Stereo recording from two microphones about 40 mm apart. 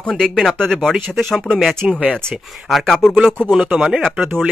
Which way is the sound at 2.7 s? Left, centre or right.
Centre.